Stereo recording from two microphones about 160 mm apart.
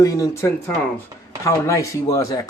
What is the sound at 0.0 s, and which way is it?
A man's voice, 20° left (ahead or behind).